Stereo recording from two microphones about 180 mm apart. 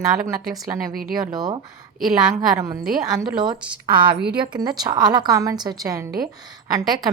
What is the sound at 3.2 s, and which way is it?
A woman's voice, 25° right (ahead or behind).